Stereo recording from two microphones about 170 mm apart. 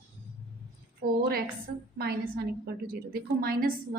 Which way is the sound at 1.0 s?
60° right (ahead or behind).